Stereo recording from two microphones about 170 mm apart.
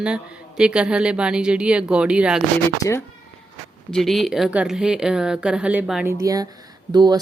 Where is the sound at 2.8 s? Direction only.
15° left (ahead or behind).